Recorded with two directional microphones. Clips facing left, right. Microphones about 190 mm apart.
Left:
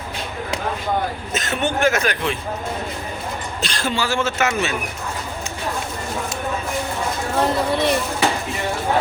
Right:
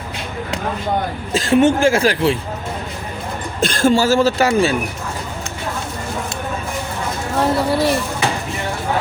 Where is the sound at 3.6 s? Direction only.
50° right (ahead or behind); by 4.7 s 35° right (ahead or behind).